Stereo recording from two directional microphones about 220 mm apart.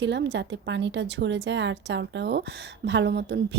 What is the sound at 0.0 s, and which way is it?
A woman's voice, 50° right (ahead or behind).